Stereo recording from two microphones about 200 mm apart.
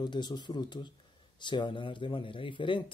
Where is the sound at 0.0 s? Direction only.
20° left (ahead or behind).